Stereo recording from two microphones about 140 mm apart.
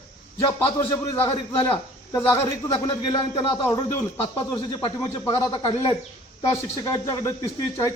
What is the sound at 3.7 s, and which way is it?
A man's voice, 20° left (ahead or behind).